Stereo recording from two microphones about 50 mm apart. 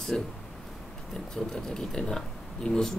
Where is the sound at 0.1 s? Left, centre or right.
Centre.